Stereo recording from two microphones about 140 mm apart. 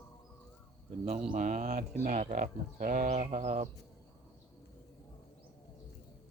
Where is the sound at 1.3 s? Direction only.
65° right (ahead or behind).